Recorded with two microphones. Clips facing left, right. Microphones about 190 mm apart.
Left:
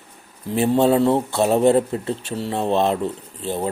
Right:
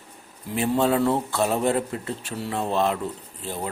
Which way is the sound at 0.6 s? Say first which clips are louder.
Left 5 dB; 25° left (ahead or behind).